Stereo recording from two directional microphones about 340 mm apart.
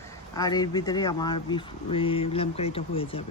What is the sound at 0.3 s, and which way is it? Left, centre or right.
Speech, centre.